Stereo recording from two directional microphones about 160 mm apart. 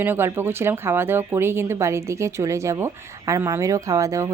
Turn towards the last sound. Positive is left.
turn(degrees=-20)  # may be behind; listen again after turning